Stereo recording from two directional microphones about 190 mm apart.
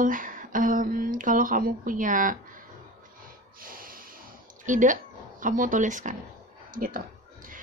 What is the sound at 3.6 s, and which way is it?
Snort, 50° right (ahead or behind).